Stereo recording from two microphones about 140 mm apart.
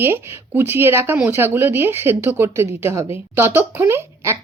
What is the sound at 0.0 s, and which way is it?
A woman's voice, 15° right (ahead or behind).